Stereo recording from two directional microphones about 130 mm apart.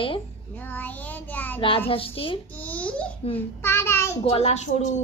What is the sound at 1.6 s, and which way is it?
Speech, 45° left (ahead or behind).